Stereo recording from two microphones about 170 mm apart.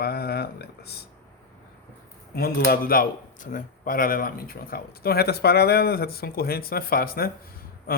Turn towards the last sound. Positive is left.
turn(degrees=60)  # may be behind; listen again after turning